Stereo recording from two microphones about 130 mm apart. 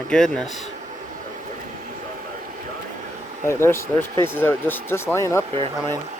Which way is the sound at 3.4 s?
20° left (ahead or behind).